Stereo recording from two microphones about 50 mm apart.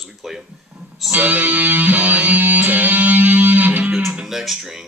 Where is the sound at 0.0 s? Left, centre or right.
Centre.